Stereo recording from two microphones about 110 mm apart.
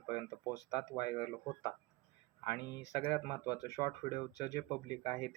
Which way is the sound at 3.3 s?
30° left (ahead or behind).